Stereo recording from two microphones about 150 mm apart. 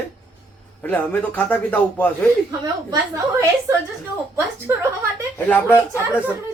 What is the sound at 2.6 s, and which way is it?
A woman's voice, 25° right (ahead or behind).